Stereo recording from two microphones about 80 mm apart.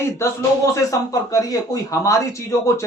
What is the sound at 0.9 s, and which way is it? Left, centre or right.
Speech, left.